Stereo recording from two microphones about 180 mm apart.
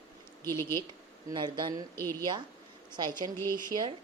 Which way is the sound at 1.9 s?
15° left (ahead or behind).